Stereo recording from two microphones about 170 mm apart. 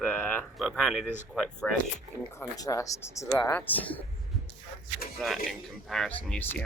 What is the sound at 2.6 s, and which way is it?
Speech, 20° left (ahead or behind).